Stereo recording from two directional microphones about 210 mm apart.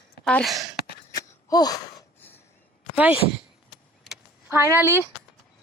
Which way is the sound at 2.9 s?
5° right (ahead or behind).